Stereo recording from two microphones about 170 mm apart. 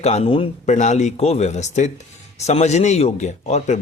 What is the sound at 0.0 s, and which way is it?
Speech, 40° left (ahead or behind).